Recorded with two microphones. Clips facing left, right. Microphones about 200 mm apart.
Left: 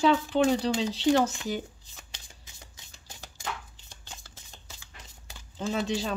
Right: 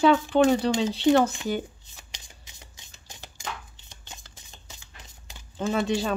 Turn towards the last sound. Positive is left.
turn(degrees=-55)  # may be behind; listen again after turning